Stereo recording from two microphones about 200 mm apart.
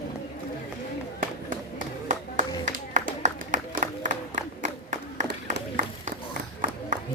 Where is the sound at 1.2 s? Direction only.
40° right (ahead or behind).